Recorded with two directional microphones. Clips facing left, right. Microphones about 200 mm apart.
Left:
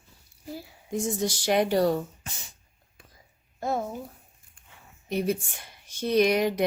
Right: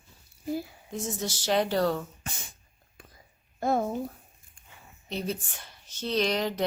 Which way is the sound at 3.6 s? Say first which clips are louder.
Right 2 dB; 55° right (ahead or behind).